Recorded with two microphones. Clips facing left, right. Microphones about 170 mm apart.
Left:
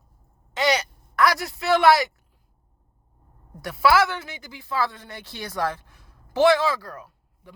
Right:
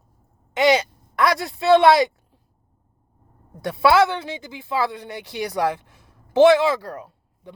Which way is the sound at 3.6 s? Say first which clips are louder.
Right 3 dB; 25° right (ahead or behind).